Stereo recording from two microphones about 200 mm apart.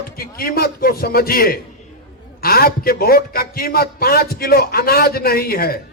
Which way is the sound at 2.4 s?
50° left (ahead or behind).